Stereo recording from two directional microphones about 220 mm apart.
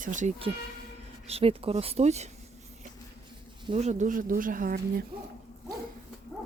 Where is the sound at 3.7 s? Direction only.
35° right (ahead or behind).